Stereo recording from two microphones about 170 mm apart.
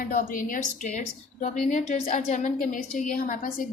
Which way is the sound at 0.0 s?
55° left (ahead or behind).